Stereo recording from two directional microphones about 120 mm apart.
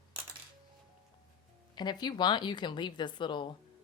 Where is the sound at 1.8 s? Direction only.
35° left (ahead or behind).